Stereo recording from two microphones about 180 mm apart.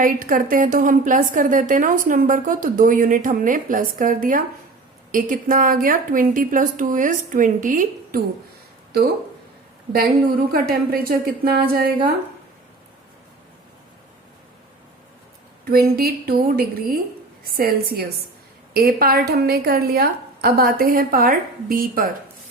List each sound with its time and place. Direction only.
0.0 s a woman's voice: 50° right (ahead or behind)
10.5 s a woman's voice: 55° right (ahead or behind)
15.7 s a woman's voice: 55° right (ahead or behind)